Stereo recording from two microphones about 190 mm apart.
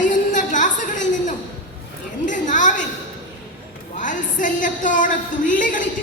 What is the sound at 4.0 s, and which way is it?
A woman's voice, 45° left (ahead or behind).